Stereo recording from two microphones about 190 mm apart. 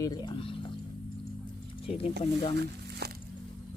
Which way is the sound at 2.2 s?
30° left (ahead or behind).